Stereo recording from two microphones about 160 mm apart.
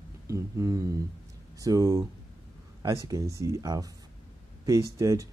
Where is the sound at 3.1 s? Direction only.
20° right (ahead or behind).